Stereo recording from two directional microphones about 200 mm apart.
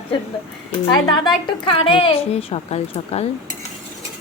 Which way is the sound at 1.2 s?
25° left (ahead or behind).